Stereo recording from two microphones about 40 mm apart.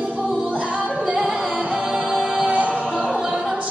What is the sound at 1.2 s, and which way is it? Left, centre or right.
Music, centre.